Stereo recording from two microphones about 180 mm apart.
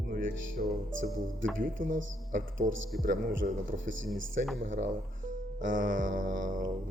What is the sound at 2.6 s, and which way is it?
Speech, 90° right.